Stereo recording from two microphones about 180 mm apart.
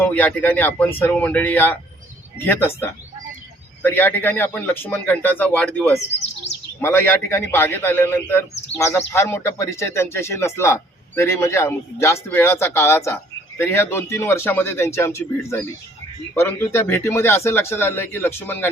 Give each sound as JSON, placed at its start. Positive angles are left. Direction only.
{"t": 0.0, "sound": "a man's voice", "side_deg": 10}
{"t": 6.5, "sound": "speech", "side_deg": 40}
{"t": 6.8, "sound": "a man's voice", "side_deg": 10}